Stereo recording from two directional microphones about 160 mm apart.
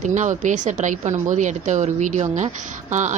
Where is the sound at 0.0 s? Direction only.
50° right (ahead or behind).